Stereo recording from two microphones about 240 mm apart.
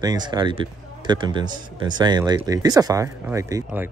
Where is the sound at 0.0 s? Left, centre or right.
Centre.